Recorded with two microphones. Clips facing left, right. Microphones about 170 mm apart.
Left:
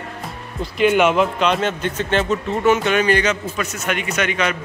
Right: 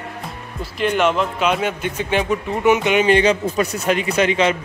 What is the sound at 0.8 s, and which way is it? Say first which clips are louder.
Speech: left 3 dB; 5° left (ahead or behind).